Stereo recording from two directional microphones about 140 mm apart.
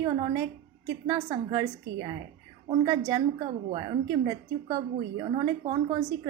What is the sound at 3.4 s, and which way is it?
Speech, 35° right (ahead or behind).